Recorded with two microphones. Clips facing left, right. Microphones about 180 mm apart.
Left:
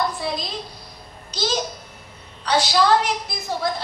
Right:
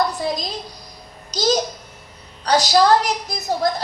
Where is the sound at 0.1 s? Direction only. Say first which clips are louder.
Right 3 dB; 40° right (ahead or behind).